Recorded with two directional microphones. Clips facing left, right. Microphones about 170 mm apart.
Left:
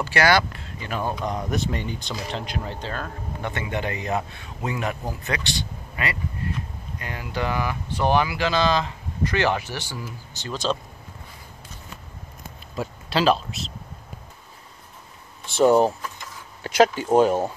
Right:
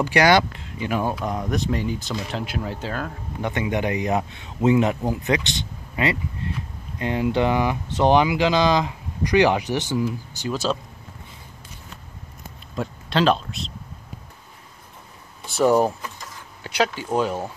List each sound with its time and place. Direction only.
0.0 s speech: 15° right (ahead or behind)
12.7 s speech: 5° left (ahead or behind)
15.5 s speech: 25° left (ahead or behind)
16.6 s speech: 45° left (ahead or behind)